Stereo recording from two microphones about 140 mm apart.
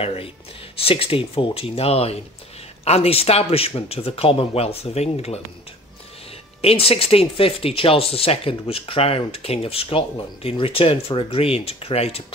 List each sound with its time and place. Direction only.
0.0 s speech: 45° left (ahead or behind)
6.6 s speech: 45° left (ahead or behind)